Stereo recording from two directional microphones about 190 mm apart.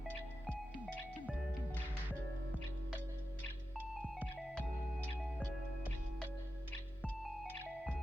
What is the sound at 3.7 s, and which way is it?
Music, 10° right (ahead or behind).